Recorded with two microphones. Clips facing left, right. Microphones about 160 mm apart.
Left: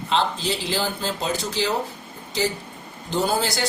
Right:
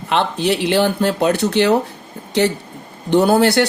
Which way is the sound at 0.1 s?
65° right (ahead or behind).